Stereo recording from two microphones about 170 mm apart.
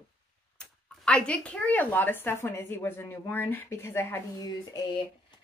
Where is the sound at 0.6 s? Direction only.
5° left (ahead or behind).